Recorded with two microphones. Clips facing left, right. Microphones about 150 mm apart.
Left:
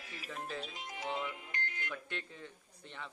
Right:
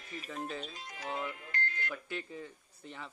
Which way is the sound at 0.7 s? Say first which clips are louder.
Even; 20° left (ahead or behind).